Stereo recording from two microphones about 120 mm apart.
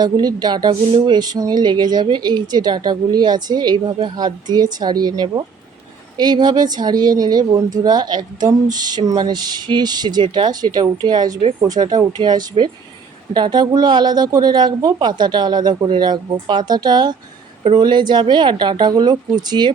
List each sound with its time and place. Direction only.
0.0 s speech: 35° right (ahead or behind)